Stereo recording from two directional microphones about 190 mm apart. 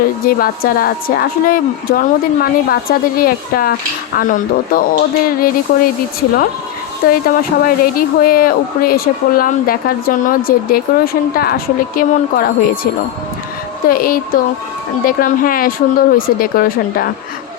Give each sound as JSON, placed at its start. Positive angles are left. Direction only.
{"t": 0.3, "sound": "speech", "side_deg": 50}
{"t": 7.1, "sound": "speech", "side_deg": 50}